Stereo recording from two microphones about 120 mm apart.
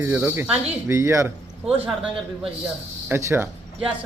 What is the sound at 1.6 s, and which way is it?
Speech, 10° right (ahead or behind).